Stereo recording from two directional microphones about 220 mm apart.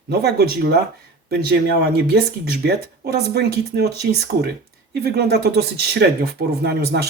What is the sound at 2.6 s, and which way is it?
Speech, 45° right (ahead or behind).